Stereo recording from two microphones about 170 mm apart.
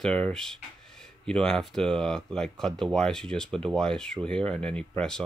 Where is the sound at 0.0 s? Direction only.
5° left (ahead or behind).